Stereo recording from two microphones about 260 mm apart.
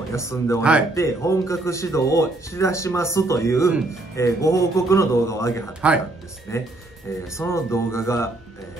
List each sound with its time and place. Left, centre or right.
0.1 s speech: centre
0.6 s speech: centre
0.9 s speech: centre
5.8 s speech: centre
6.5 s speech: centre